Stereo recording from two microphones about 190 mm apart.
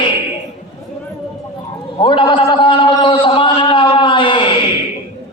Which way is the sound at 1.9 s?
25° left (ahead or behind).